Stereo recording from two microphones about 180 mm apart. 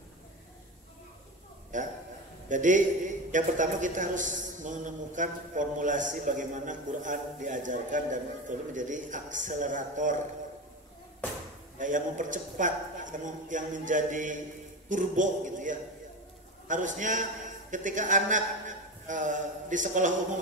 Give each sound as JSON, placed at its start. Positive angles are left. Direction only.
{"t": 1.7, "sound": "a man's voice", "side_deg": -45}
{"t": 11.8, "sound": "a man's voice", "side_deg": -45}